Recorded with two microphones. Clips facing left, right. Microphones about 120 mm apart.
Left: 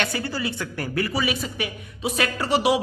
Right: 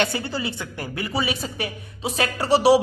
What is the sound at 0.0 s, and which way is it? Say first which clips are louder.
A woman's voice: right 2 dB; 25° right (ahead or behind).